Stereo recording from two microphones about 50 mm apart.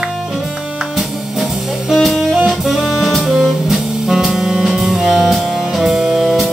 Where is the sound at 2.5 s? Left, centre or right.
Centre.